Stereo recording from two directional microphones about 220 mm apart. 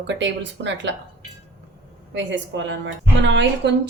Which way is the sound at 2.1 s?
55° right (ahead or behind).